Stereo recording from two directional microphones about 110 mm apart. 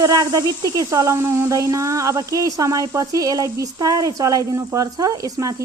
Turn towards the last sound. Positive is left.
turn(degrees=-30)  # may be behind; listen again after turning